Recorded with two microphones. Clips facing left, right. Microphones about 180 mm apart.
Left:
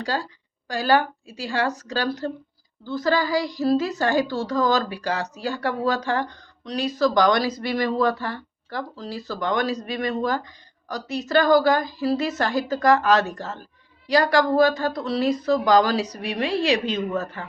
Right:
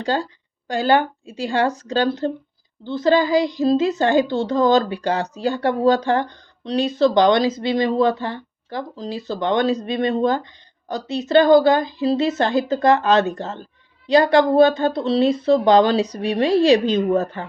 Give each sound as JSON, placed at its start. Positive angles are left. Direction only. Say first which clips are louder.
{"t": 0.0, "sound": "a woman's voice", "louder": "right 5 dB", "side_deg": -25}